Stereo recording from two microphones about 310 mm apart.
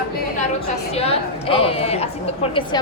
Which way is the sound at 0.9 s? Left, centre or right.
Centre.